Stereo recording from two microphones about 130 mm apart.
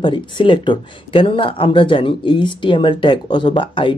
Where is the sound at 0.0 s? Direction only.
40° left (ahead or behind).